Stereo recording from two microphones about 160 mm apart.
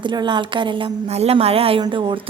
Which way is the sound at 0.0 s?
30° right (ahead or behind).